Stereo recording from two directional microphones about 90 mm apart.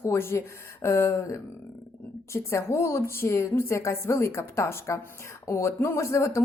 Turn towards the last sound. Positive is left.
turn(degrees=30)  # may be behind; listen again after turning